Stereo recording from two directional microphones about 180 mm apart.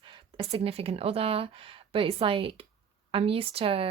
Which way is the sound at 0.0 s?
30° right (ahead or behind).